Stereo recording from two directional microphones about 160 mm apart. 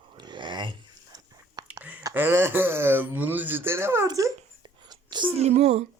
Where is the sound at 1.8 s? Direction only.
10° right (ahead or behind).